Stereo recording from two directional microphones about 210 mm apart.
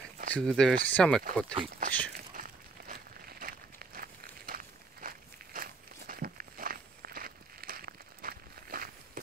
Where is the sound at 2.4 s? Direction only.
45° right (ahead or behind).